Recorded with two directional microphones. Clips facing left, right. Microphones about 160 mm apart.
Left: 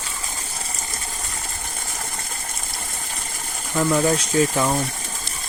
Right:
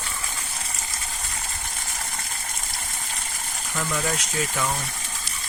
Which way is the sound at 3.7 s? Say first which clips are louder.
Left 9 dB; 30° left (ahead or behind).